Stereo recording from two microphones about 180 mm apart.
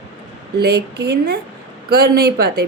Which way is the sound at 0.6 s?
65° right (ahead or behind).